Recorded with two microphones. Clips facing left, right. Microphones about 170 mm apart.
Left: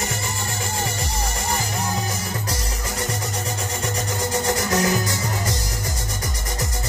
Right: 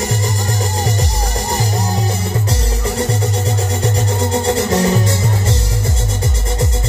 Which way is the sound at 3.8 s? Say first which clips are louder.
Right 6 dB; 30° right (ahead or behind).